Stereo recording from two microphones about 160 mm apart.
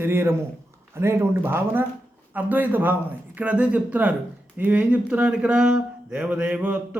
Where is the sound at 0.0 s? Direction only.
15° right (ahead or behind).